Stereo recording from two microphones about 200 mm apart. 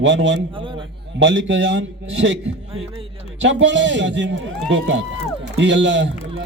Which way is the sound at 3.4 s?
65° right (ahead or behind).